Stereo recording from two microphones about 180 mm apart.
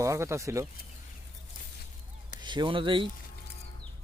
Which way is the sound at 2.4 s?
25° right (ahead or behind).